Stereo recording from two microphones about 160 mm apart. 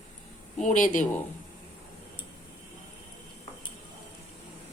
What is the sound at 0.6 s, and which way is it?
Speech, 50° left (ahead or behind).